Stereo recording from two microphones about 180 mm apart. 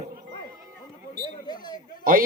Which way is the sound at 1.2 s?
25° left (ahead or behind).